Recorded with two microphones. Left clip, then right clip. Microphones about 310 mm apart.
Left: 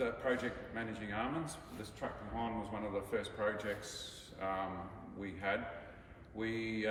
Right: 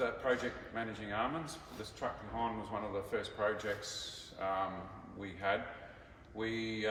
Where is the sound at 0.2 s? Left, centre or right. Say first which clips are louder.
Right 2 dB; centre.